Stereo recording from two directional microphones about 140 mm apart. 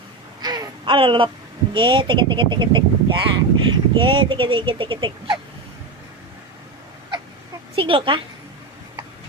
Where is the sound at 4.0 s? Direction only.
35° right (ahead or behind).